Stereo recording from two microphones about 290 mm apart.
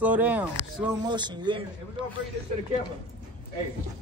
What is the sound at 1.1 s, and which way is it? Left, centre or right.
Speech, centre.